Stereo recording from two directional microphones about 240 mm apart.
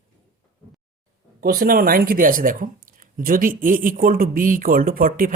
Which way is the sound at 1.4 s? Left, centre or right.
Right.